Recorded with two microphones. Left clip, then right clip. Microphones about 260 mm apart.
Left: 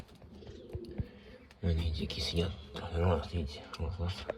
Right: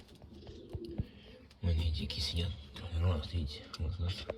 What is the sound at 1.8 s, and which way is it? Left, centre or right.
Speech, centre.